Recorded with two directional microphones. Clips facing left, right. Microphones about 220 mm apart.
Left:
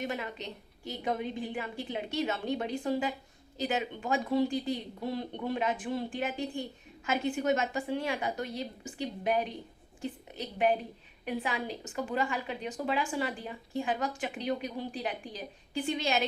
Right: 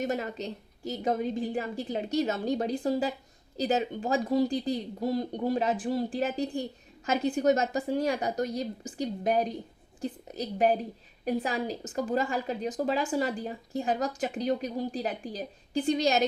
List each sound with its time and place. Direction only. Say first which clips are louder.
0.0 s a woman's voice: right 5 dB; 40° right (ahead or behind)